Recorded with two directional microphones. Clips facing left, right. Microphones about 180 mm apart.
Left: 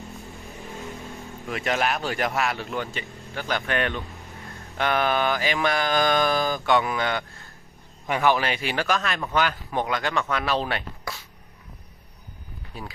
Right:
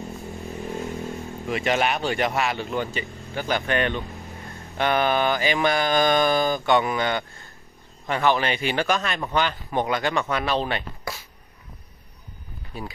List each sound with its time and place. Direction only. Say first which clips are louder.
0.2 s vehicle: right 7 dB; 20° right (ahead or behind)
1.4 s speech: right 2 dB; centre (ahead or behind)
12.7 s speech: right 3 dB; centre (ahead or behind)